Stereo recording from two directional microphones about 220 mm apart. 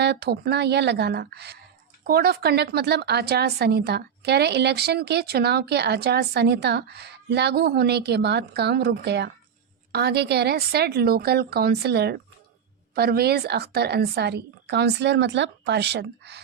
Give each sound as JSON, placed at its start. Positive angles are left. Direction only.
{"t": 0.0, "sound": "a woman's voice", "side_deg": -50}